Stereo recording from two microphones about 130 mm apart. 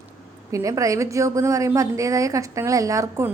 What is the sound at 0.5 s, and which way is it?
A woman's voice, 25° right (ahead or behind).